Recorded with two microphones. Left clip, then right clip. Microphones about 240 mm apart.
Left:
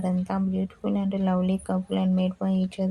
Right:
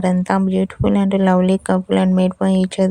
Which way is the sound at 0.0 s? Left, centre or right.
Right.